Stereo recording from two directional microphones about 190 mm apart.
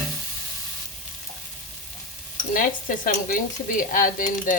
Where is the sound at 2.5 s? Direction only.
45° left (ahead or behind).